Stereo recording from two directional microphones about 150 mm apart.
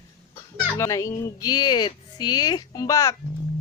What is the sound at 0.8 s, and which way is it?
Speech, 20° left (ahead or behind).